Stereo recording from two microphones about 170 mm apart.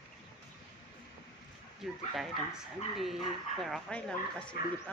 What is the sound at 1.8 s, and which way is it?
Speech, centre (ahead or behind).